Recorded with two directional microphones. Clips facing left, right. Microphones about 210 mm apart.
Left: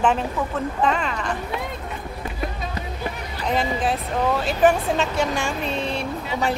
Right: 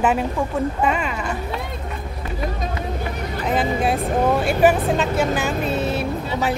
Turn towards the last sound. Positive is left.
turn(degrees=-5)  # may be behind; listen again after turning